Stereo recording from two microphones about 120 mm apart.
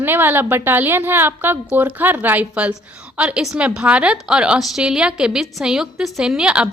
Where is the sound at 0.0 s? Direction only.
15° right (ahead or behind).